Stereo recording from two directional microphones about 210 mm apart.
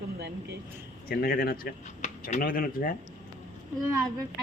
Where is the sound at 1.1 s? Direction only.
45° left (ahead or behind).